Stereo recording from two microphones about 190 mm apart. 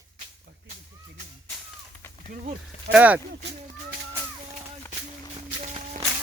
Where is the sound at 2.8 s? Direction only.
10° right (ahead or behind).